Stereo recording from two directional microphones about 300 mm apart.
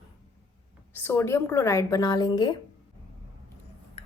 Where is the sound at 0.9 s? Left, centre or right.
Centre.